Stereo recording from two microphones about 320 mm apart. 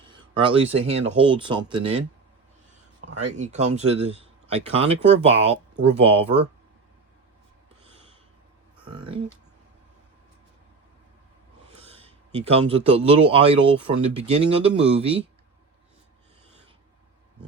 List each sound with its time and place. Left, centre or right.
0.0 s a man's voice: centre
3.2 s speech: right
8.8 s speech: centre
11.8 s a man's voice: centre